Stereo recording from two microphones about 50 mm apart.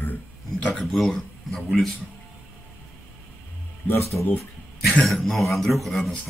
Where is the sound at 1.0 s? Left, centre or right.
Centre.